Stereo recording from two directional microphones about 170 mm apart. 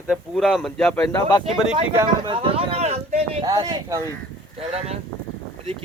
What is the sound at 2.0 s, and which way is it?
Speech, 30° right (ahead or behind).